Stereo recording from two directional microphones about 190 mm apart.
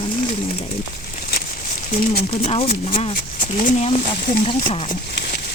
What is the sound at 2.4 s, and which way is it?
Speech, 30° left (ahead or behind).